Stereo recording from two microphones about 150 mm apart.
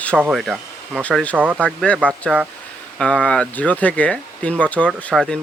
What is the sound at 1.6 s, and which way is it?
Speech, 5° left (ahead or behind).